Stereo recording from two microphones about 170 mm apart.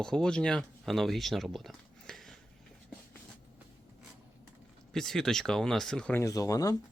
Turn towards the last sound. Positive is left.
turn(degrees=20)  # may be behind; listen again after turning